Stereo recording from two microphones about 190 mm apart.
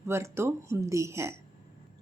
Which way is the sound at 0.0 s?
15° right (ahead or behind).